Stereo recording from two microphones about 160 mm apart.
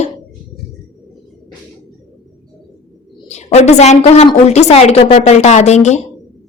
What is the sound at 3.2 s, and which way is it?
A woman's voice, 45° left (ahead or behind).